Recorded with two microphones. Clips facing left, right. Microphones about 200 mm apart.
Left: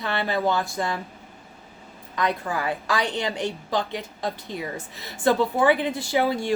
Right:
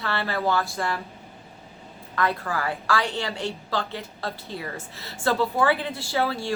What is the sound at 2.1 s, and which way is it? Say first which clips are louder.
A woman's voice: even; 20° left (ahead or behind).